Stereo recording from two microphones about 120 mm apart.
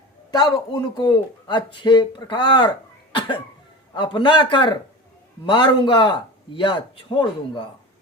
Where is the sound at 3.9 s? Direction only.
40° left (ahead or behind).